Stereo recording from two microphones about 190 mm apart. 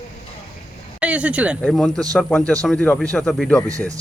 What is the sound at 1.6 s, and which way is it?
Speech, 5° left (ahead or behind).